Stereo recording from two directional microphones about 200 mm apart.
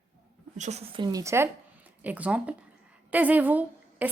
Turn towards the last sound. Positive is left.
turn(degrees=-10)  # may be behind; listen again after turning